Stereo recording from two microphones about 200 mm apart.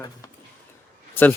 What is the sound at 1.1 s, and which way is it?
Speech, 10° left (ahead or behind).